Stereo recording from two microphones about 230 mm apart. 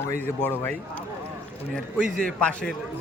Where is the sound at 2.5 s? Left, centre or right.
Centre.